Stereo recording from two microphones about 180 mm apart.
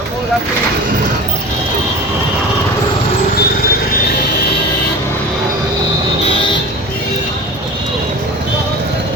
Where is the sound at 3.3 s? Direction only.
60° left (ahead or behind).